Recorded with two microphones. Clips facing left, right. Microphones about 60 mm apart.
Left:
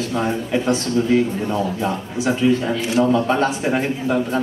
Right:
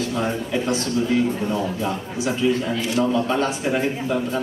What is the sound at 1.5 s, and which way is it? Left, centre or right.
A man's voice, left.